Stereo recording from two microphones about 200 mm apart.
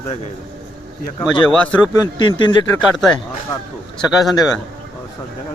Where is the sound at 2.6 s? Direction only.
5° left (ahead or behind).